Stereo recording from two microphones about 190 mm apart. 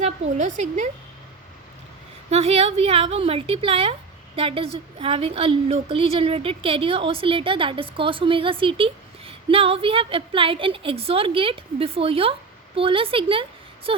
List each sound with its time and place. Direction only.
0.0 s a woman's voice: 40° right (ahead or behind)
2.3 s a woman's voice: 35° right (ahead or behind)